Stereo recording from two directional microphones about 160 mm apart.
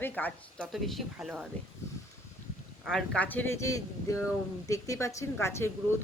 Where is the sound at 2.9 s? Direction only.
5° left (ahead or behind).